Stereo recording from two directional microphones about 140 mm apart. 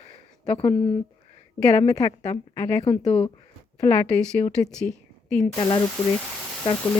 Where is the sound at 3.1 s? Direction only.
40° left (ahead or behind).